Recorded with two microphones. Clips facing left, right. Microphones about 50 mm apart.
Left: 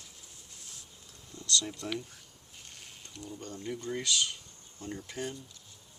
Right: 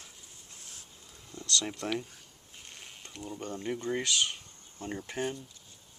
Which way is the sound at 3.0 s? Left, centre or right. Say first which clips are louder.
Right 4 dB; right.